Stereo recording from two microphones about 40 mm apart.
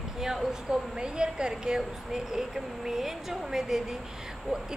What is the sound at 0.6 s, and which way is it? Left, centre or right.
A woman's voice, right.